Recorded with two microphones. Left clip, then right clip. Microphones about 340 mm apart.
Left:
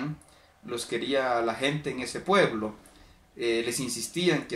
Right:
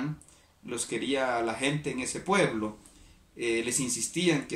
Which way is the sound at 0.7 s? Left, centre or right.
Centre.